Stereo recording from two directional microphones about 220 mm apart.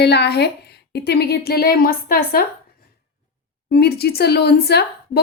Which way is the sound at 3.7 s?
45° left (ahead or behind).